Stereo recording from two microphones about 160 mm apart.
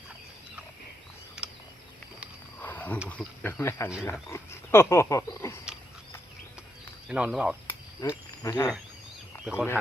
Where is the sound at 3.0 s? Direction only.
10° left (ahead or behind).